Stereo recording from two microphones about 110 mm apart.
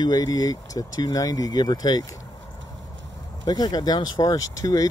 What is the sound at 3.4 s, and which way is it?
Speech, 40° left (ahead or behind).